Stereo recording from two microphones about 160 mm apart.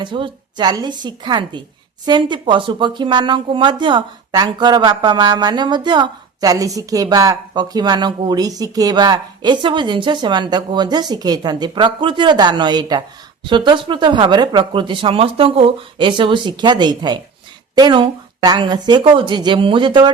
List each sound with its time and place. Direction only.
0.0 s speech: 30° right (ahead or behind)